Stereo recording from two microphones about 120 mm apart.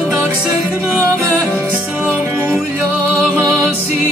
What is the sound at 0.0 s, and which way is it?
Music, centre (ahead or behind).